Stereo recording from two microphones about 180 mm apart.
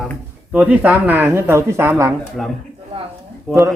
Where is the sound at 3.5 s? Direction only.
Centre (ahead or behind).